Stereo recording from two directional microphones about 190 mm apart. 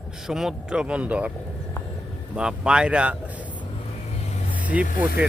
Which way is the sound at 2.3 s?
5° right (ahead or behind).